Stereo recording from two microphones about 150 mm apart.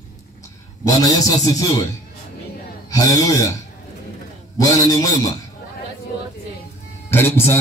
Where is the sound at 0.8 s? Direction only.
25° left (ahead or behind).